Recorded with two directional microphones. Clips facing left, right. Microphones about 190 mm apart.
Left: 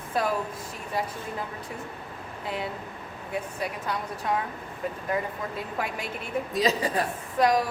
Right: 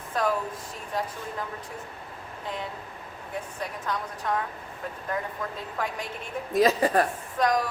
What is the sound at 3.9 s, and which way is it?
Speech, 10° left (ahead or behind).